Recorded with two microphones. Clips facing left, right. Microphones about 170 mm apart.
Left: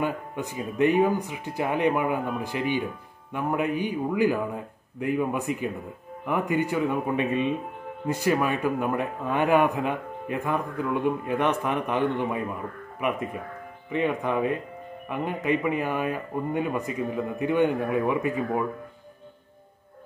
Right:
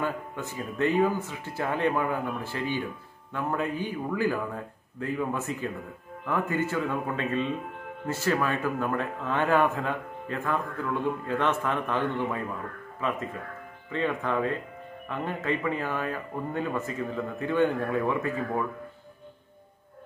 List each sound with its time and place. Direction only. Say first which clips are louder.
0.0 s a man's voice: left 3 dB; 15° left (ahead or behind)